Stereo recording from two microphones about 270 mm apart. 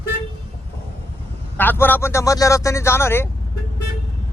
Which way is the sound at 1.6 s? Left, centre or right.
Centre.